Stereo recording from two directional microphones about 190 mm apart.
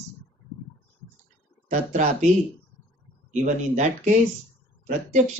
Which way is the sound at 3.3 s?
40° right (ahead or behind).